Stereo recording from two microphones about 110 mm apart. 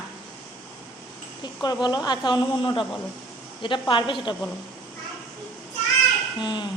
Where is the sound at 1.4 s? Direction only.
40° left (ahead or behind).